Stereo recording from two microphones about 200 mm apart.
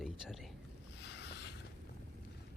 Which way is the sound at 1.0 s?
55° left (ahead or behind).